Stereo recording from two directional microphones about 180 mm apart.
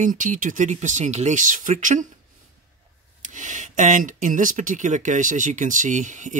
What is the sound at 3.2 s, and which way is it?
Speech, 45° right (ahead or behind).